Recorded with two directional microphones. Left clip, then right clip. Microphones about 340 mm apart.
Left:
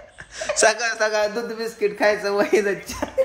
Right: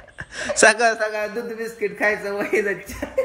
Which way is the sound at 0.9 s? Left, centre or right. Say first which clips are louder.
Left 4 dB; centre.